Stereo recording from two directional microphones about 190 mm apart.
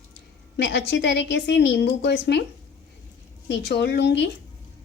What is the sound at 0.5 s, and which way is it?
A woman's voice, 65° left (ahead or behind).